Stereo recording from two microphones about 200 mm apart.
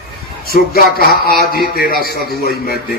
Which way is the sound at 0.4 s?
50° left (ahead or behind).